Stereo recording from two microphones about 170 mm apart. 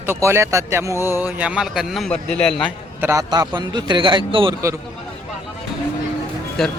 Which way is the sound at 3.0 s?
20° right (ahead or behind).